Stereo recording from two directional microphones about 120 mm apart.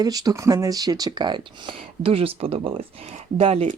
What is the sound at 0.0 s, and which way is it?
Speech, 30° right (ahead or behind).